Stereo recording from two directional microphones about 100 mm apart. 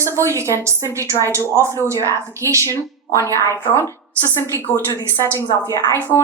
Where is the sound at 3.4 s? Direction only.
25° left (ahead or behind).